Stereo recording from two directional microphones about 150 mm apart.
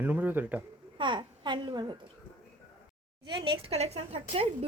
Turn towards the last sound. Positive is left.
turn(degrees=-40)  # may be behind; listen again after turning